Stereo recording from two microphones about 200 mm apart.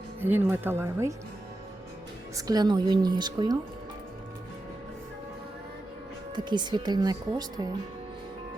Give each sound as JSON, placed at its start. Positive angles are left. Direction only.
{"t": 0.2, "sound": "speech", "side_deg": -10}
{"t": 2.3, "sound": "speech", "side_deg": -20}
{"t": 6.3, "sound": "speech", "side_deg": -20}